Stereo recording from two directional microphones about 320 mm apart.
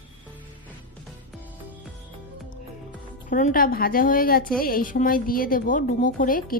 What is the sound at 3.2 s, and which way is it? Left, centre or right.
Speech, left.